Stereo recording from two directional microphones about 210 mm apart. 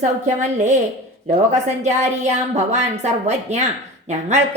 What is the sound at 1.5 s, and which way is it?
A woman's voice, 35° right (ahead or behind).